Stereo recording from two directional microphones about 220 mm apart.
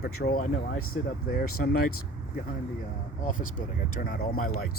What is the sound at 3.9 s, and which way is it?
Speech, 40° left (ahead or behind).